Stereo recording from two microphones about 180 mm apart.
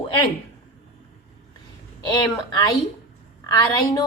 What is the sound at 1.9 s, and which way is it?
A woman's voice, 20° left (ahead or behind).